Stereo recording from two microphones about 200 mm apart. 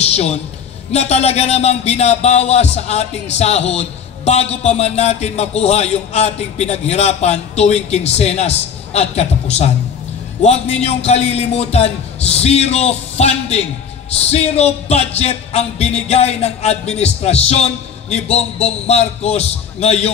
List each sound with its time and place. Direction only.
0.0 s a man's voice: 30° left (ahead or behind)